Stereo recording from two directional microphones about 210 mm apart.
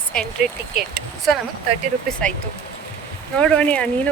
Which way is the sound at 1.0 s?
50° right (ahead or behind).